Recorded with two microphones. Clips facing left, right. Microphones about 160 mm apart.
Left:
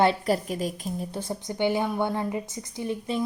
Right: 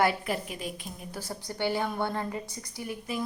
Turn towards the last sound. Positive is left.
turn(degrees=25)  # may be behind; listen again after turning